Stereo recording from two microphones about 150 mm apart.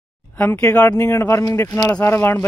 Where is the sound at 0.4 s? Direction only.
15° left (ahead or behind).